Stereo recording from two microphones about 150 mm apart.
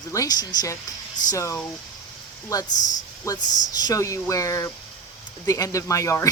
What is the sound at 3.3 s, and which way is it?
Speech, 20° left (ahead or behind).